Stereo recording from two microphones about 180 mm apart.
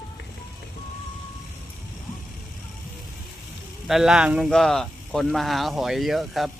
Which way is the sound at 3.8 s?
Centre (ahead or behind).